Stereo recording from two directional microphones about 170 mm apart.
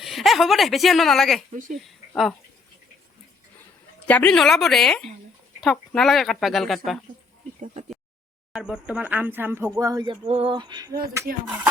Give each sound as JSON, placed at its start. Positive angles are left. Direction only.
{"t": 0.0, "sound": "speech", "side_deg": 0}
{"t": 4.0, "sound": "speech", "side_deg": 10}
{"t": 7.6, "sound": "speech", "side_deg": -40}
{"t": 8.5, "sound": "speech", "side_deg": -5}